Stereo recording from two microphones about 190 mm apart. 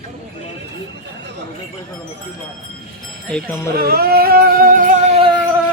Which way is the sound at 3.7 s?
55° right (ahead or behind).